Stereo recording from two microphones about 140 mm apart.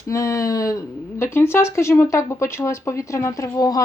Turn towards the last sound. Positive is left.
turn(degrees=25)  # may be behind; listen again after turning